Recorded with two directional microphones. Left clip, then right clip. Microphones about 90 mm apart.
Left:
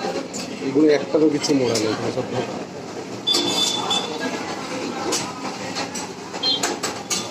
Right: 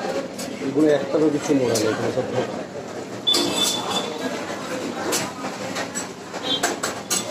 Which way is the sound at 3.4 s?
35° left (ahead or behind).